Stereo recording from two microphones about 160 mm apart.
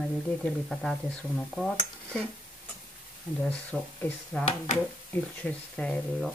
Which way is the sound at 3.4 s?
5° left (ahead or behind).